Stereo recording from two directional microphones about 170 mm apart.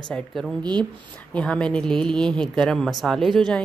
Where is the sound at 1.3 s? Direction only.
5° left (ahead or behind).